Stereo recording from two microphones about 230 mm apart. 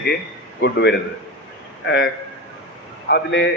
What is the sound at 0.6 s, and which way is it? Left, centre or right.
Speech, left.